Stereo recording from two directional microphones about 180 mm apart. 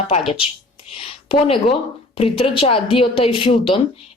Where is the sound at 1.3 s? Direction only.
30° left (ahead or behind).